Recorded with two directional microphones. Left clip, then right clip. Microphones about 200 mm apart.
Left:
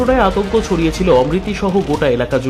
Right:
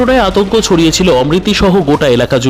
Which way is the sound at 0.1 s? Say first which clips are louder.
Right 4 dB; 35° right (ahead or behind).